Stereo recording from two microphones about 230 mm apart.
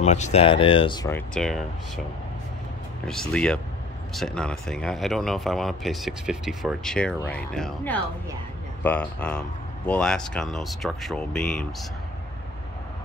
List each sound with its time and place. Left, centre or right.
0.0 s speech: left
1.3 s speech: centre
3.1 s speech: centre